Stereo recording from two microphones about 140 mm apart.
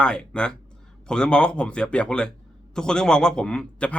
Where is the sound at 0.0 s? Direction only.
5° left (ahead or behind).